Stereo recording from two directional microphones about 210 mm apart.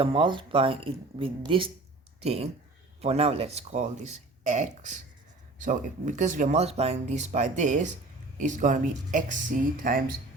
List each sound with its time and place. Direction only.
0.0 s speech: 25° right (ahead or behind); by 10.2 s 40° right (ahead or behind)